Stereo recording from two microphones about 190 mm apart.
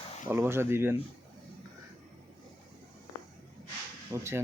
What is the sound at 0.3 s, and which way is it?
Speech, 10° right (ahead or behind).